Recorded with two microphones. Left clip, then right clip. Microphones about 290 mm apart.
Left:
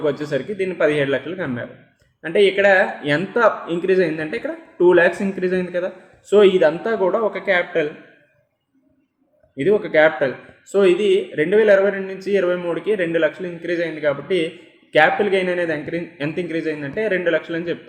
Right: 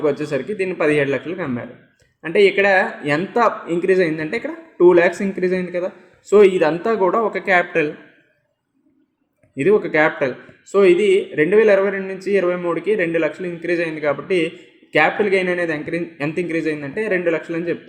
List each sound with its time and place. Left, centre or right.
0.0 s a man's voice: centre
2.6 s a man's voice: centre
9.6 s a man's voice: right